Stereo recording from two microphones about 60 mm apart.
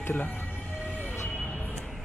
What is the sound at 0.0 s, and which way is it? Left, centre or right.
Speech, left.